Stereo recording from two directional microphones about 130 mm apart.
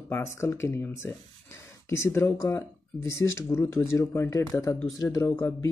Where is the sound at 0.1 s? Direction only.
20° left (ahead or behind).